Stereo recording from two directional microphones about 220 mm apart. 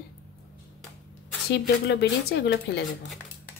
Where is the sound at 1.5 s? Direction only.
50° left (ahead or behind).